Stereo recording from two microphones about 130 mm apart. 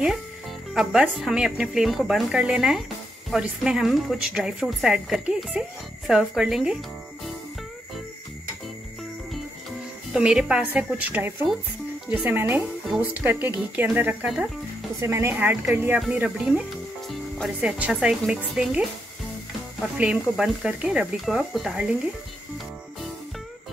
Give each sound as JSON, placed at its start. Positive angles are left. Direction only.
{"t": 0.7, "sound": "a woman's voice", "side_deg": -5}
{"t": 10.1, "sound": "speech", "side_deg": -5}
{"t": 20.0, "sound": "speech", "side_deg": -5}